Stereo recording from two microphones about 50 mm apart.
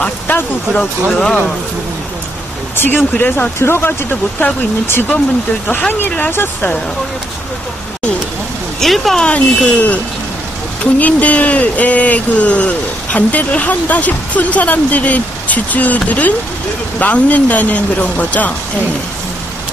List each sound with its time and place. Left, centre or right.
0.3 s speech: left
1.1 s speech: centre
2.7 s speech: left
3.5 s speech: left
5.7 s speech: left
6.3 s speech: left
8.7 s speech: centre
9.2 s speech: left